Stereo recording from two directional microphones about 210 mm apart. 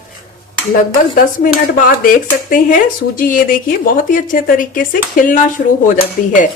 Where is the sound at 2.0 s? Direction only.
40° left (ahead or behind).